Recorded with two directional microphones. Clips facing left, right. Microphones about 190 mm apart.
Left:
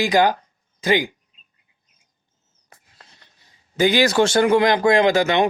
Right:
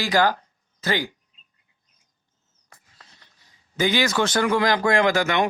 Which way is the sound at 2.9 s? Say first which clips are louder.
Left 2 dB; 20° left (ahead or behind).